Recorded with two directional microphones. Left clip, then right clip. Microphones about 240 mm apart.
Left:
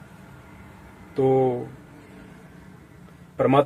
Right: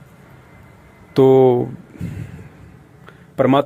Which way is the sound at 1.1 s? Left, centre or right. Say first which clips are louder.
Right 9 dB; right.